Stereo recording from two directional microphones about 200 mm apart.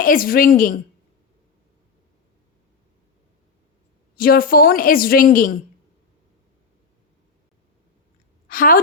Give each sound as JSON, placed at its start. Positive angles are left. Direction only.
{"t": 0.0, "sound": "a woman's voice", "side_deg": 45}
{"t": 4.2, "sound": "a woman's voice", "side_deg": 45}
{"t": 8.4, "sound": "a woman's voice", "side_deg": 45}